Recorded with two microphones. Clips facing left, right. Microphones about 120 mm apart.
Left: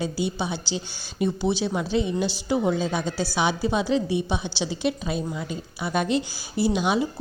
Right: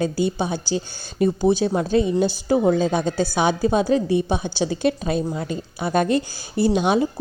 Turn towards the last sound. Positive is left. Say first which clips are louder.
# right 4 dB
turn(degrees=-45)  # may be behind; listen again after turning